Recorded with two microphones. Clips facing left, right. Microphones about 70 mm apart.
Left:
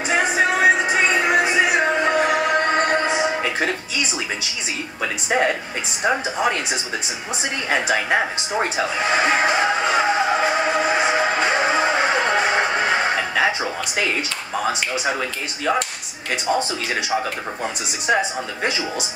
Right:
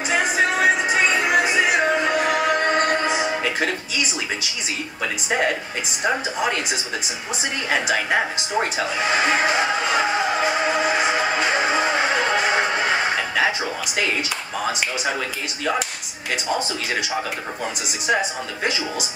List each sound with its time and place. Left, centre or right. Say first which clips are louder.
0.1 s music: left 1 dB; centre
6.0 s speech: left 2 dB; centre
7.7 s music: left 1 dB; centre
15.0 s speech: left 1 dB; centre
18.0 s speech: left 2 dB; centre